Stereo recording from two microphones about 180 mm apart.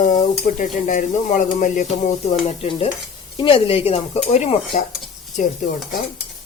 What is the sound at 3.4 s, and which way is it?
Speech, 30° left (ahead or behind).